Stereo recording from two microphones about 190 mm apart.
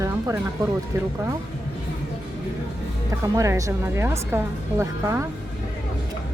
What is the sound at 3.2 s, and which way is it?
A woman's voice, 15° right (ahead or behind).